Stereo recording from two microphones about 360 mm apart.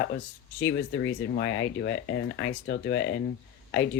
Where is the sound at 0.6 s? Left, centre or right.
Left.